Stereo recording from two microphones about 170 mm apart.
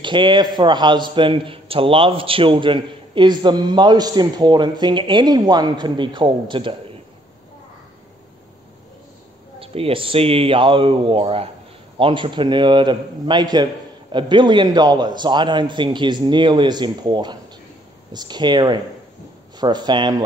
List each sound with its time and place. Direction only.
0.0 s a man's voice: 30° right (ahead or behind)
9.6 s a man's voice: 35° right (ahead or behind)